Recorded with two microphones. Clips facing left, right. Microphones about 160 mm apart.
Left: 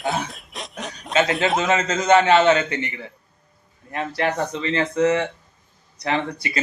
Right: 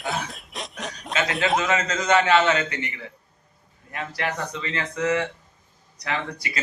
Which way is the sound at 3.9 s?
30° left (ahead or behind).